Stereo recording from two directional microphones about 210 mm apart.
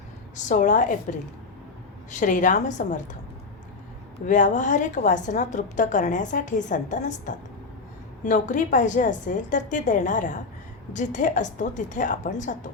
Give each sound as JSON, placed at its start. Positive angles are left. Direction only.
{"t": 0.3, "sound": "a woman's voice", "side_deg": 35}
{"t": 2.0, "sound": "a woman's voice", "side_deg": 35}
{"t": 4.3, "sound": "a woman's voice", "side_deg": 35}